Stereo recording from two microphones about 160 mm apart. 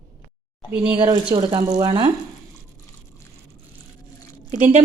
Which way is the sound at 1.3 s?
25° right (ahead or behind).